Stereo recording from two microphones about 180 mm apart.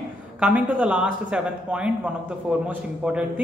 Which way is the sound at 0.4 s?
10° right (ahead or behind).